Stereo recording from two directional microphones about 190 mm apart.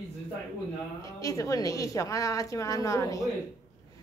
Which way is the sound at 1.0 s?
15° left (ahead or behind).